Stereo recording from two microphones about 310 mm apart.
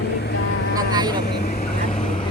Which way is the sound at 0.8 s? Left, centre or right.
Centre.